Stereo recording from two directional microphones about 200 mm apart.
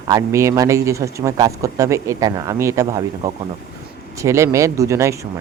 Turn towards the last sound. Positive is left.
turn(degrees=-15)  # may be behind; listen again after turning